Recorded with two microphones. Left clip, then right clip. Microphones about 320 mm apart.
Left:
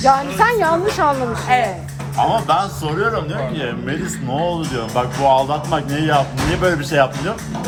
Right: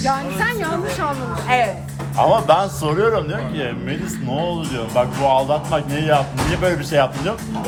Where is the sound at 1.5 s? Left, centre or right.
Centre.